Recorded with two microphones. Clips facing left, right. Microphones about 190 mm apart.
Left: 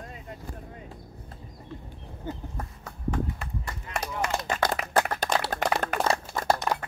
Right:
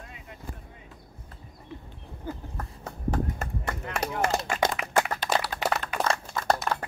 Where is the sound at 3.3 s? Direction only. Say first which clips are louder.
Right 4 dB; 60° right (ahead or behind).